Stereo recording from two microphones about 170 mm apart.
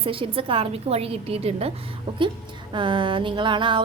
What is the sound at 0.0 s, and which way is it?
A woman's voice, 30° right (ahead or behind).